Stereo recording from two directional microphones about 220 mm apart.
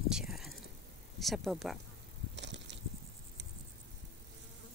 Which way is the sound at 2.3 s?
55° right (ahead or behind).